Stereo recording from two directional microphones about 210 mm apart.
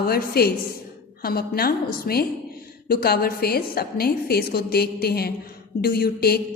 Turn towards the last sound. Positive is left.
turn(degrees=45)  # may be behind; listen again after turning